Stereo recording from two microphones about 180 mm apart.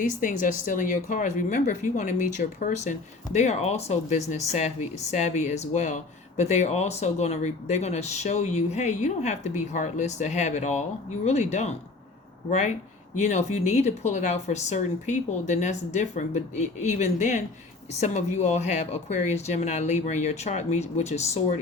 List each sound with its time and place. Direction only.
0.0 s speech: 45° left (ahead or behind)